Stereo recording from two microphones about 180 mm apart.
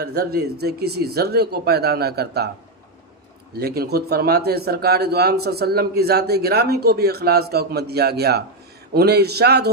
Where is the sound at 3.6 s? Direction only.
60° right (ahead or behind).